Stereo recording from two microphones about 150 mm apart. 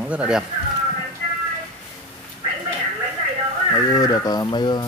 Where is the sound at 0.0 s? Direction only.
10° right (ahead or behind).